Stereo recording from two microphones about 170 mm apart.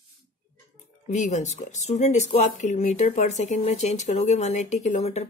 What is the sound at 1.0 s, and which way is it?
A woman's voice, 45° left (ahead or behind).